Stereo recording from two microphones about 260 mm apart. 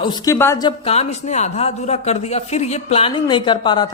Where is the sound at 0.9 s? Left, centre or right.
Left.